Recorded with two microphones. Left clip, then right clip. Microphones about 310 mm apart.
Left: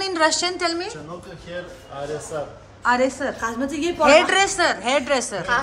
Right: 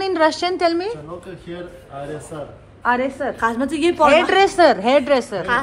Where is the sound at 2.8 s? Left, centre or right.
Centre.